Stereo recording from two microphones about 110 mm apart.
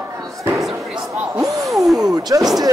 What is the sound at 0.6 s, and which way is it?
Slam, 5° right (ahead or behind).